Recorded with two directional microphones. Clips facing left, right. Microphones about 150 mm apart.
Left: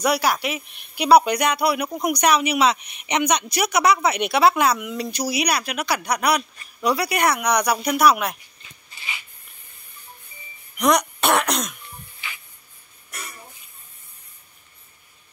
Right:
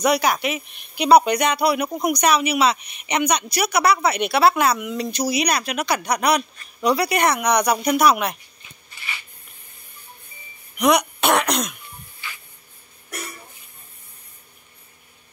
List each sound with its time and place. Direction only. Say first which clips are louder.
0.0 s speech: right 2 dB; 5° left (ahead or behind)
10.8 s speech: right 1 dB; 5° right (ahead or behind)